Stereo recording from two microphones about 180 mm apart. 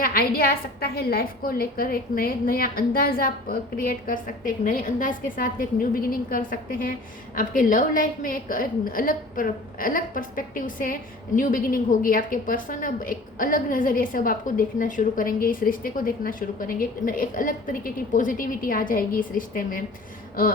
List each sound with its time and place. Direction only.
0.0 s a woman's voice: 55° left (ahead or behind)